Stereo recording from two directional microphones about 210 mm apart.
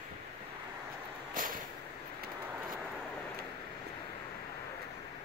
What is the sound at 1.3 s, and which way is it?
Vehicle, 40° right (ahead or behind).